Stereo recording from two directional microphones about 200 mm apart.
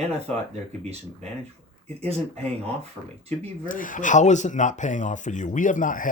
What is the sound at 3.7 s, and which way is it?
Speech, 40° left (ahead or behind).